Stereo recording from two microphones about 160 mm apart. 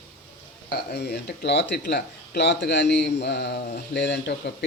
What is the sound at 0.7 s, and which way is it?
Speech, 90° left.